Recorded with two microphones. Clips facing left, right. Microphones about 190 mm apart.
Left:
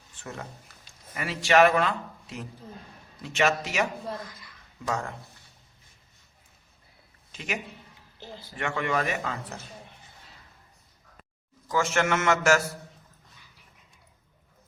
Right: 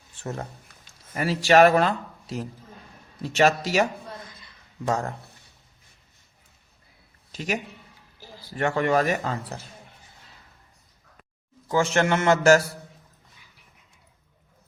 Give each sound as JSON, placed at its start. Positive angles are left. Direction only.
{"t": 0.2, "sound": "speech", "side_deg": -35}
{"t": 0.7, "sound": "a sound", "side_deg": 5}
{"t": 1.1, "sound": "speech", "side_deg": -35}
{"t": 4.3, "sound": "a sound", "side_deg": -25}
{"t": 4.9, "sound": "speech", "side_deg": -40}
{"t": 7.3, "sound": "speech", "side_deg": -35}
{"t": 11.7, "sound": "speech", "side_deg": -30}